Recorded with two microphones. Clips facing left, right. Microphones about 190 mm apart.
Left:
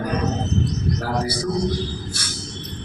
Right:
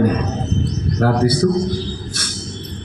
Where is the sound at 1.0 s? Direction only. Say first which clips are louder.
Right 15 dB; 60° right (ahead or behind).